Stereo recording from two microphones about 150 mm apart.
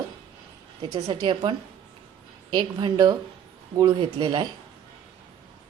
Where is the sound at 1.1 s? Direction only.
30° right (ahead or behind).